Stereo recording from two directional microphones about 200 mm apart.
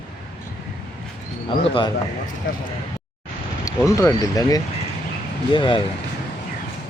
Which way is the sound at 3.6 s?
15° left (ahead or behind).